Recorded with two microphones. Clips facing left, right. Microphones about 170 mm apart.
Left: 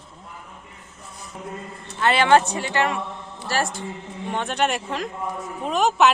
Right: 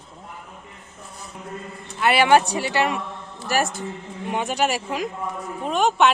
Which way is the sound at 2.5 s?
15° right (ahead or behind).